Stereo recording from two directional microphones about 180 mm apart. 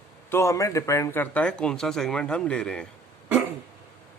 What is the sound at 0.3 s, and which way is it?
Speech, 15° left (ahead or behind).